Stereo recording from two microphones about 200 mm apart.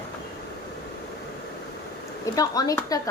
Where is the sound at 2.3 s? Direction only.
15° left (ahead or behind).